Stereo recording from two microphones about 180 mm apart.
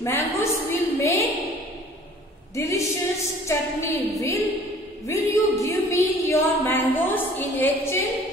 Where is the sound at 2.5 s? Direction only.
15° left (ahead or behind).